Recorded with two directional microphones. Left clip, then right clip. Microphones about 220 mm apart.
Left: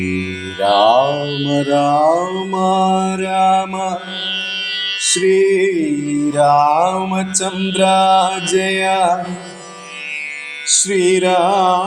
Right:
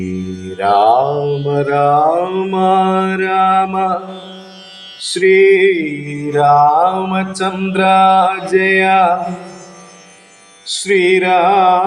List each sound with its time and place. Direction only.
0.1 s mantra: 30° left (ahead or behind)
5.2 s mantra: 35° left (ahead or behind)
10.8 s mantra: 35° left (ahead or behind)